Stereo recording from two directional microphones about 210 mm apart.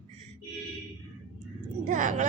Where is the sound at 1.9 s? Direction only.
40° right (ahead or behind).